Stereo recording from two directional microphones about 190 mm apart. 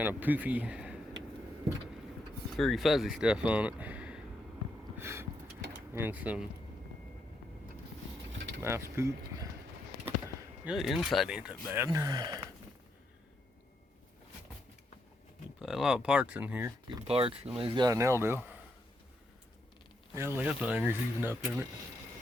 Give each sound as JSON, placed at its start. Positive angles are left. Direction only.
{"t": 0.0, "sound": "speech", "side_deg": -10}
{"t": 2.6, "sound": "speech", "side_deg": 0}
{"t": 4.9, "sound": "a sound", "side_deg": -15}
{"t": 5.9, "sound": "speech", "side_deg": -10}
{"t": 8.3, "sound": "a sound", "side_deg": -70}
{"t": 8.6, "sound": "speech", "side_deg": -15}
{"t": 10.7, "sound": "speech", "side_deg": 0}
{"t": 15.5, "sound": "speech", "side_deg": 0}
{"t": 17.1, "sound": "speech", "side_deg": -30}
{"t": 20.1, "sound": "speech", "side_deg": -10}